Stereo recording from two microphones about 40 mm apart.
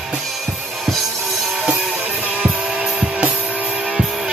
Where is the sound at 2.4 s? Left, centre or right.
Centre.